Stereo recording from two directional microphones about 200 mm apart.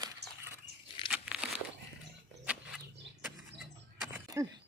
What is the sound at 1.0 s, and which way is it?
Crumpling, 5° right (ahead or behind).